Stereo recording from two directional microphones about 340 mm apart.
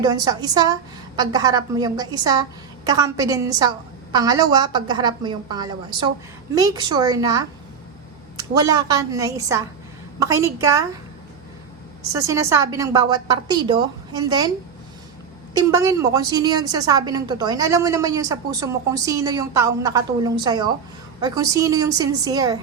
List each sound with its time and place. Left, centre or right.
0.0 s a woman's voice: centre
12.1 s a woman's voice: centre
15.5 s a woman's voice: centre